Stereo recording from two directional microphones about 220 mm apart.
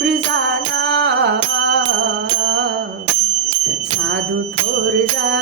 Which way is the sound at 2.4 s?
50° right (ahead or behind).